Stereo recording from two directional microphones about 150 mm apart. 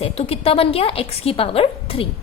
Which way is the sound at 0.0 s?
40° left (ahead or behind).